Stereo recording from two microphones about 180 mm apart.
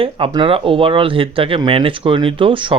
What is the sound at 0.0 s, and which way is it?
Speech, 30° right (ahead or behind).